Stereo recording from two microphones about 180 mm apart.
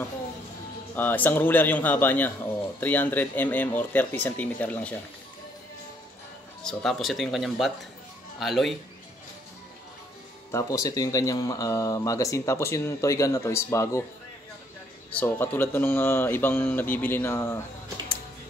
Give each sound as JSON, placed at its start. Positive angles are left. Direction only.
{"t": 0.9, "sound": "a man's voice", "side_deg": 10}
{"t": 6.6, "sound": "speech", "side_deg": 5}
{"t": 10.5, "sound": "a man's voice", "side_deg": 15}
{"t": 15.0, "sound": "a man's voice", "side_deg": 10}